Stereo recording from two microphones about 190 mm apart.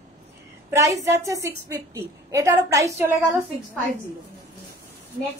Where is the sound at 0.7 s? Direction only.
15° right (ahead or behind).